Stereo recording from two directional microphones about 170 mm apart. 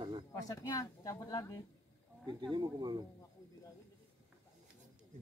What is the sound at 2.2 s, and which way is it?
Speech, 25° right (ahead or behind).